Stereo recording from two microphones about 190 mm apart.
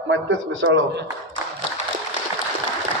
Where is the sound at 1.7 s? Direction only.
75° right (ahead or behind).